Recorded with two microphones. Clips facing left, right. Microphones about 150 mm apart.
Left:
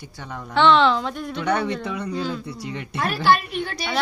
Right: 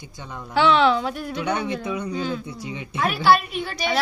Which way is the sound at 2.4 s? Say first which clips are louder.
Left 1 dB; 70° left (ahead or behind).